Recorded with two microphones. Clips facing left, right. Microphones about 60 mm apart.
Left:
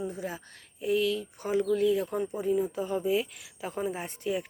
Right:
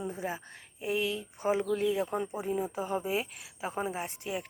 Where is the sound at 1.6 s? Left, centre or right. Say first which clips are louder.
Left 4 dB; right.